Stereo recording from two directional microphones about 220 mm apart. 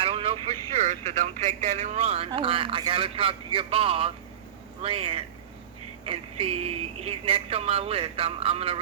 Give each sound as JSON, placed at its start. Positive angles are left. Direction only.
{"t": 0.0, "sound": "speech", "side_deg": -25}